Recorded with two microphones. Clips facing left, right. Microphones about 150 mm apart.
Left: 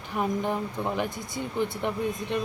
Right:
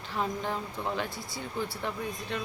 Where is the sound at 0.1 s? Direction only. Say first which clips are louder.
Left 5 dB; 15° left (ahead or behind).